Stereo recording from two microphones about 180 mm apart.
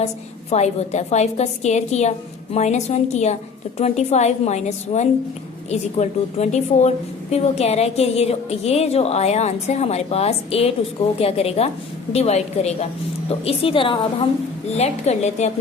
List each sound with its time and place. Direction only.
0.5 s a woman's voice: 40° left (ahead or behind)
14.8 s a woman's voice: 40° left (ahead or behind)